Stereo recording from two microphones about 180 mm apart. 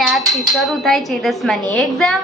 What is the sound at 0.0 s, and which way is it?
Speech, centre (ahead or behind).